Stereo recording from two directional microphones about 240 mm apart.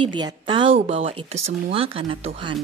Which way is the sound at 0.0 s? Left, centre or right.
Centre.